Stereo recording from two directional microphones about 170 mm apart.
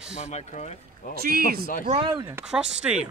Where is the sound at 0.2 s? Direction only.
40° left (ahead or behind).